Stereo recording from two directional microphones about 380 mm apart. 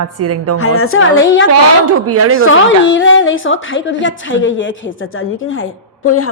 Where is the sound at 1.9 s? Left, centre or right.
Right.